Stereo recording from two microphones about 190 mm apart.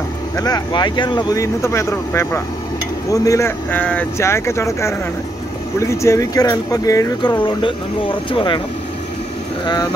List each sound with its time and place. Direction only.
0.4 s speech: 20° left (ahead or behind)